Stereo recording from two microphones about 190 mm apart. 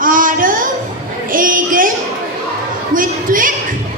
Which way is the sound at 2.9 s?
45° right (ahead or behind).